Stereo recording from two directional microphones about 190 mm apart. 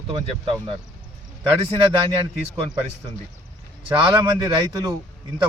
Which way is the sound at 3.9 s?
25° right (ahead or behind).